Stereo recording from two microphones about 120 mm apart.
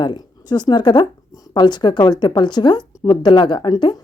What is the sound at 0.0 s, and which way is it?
A woman's voice, 40° left (ahead or behind).